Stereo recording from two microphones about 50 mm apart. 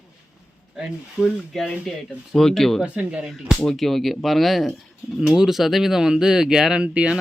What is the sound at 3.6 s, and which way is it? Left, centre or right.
A man's voice, centre.